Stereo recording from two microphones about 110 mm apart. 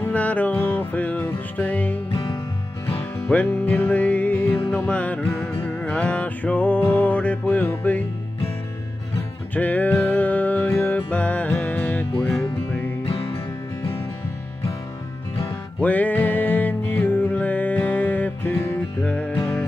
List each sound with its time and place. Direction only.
0.0 s music: 15° left (ahead or behind)
2.0 s music: 50° left (ahead or behind)
3.0 s music: 15° left (ahead or behind)
9.5 s music: 15° left (ahead or behind)
15.4 s music: 15° left (ahead or behind)